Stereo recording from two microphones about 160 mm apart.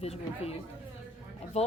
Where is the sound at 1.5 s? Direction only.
45° left (ahead or behind).